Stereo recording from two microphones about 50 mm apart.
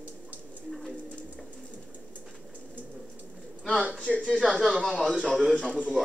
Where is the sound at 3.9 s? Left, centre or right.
Centre.